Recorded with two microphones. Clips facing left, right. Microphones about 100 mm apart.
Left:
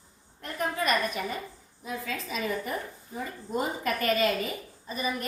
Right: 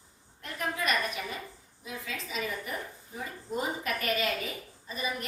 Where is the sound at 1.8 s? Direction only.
45° left (ahead or behind).